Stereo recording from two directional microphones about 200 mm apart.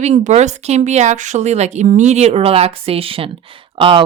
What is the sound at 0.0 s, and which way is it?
Speech, 35° right (ahead or behind).